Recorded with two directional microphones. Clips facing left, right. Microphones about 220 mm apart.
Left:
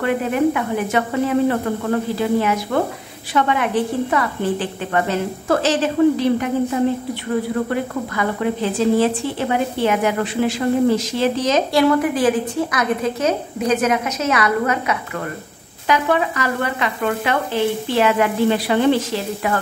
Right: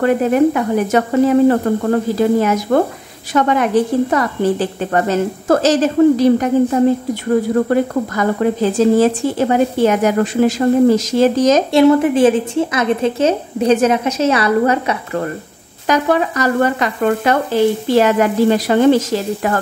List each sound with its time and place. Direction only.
0.0 s frying: 40° right (ahead or behind)
1.5 s speech: 40° right (ahead or behind)
3.3 s frying: 40° right (ahead or behind)
7.7 s speech: 40° right (ahead or behind)
11.7 s a woman's voice: 25° right (ahead or behind)
15.9 s frying: 40° right (ahead or behind)